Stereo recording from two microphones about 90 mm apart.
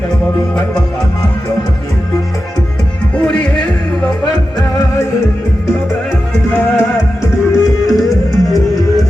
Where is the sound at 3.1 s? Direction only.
10° left (ahead or behind).